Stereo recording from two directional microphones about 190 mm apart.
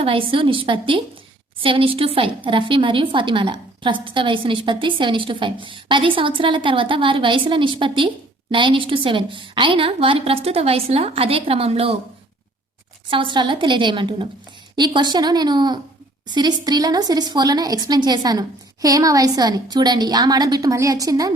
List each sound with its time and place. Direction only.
0.0 s a woman's voice: 30° right (ahead or behind)
13.1 s a woman's voice: 25° right (ahead or behind)